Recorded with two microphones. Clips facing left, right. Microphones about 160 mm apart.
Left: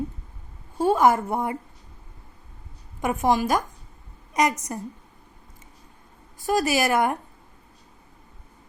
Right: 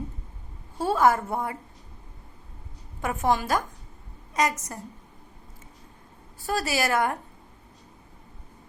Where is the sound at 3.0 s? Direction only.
15° left (ahead or behind).